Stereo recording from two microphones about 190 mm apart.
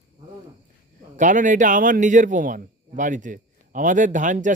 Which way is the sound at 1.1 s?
40° right (ahead or behind).